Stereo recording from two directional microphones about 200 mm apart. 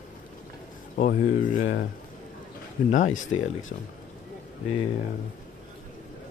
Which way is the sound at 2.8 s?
40° left (ahead or behind).